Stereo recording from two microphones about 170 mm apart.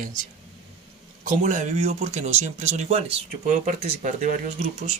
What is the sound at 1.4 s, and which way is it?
Speech, 45° right (ahead or behind).